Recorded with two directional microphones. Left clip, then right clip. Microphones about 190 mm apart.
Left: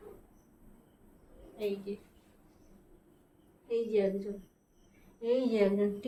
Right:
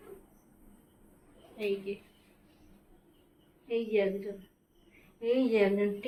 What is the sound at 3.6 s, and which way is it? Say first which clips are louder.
A woman's voice: right 1 dB; 30° right (ahead or behind).